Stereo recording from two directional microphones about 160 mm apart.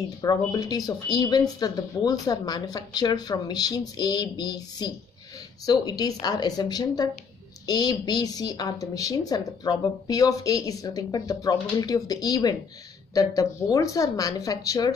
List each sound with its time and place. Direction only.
0.2 s a woman's voice: 25° left (ahead or behind)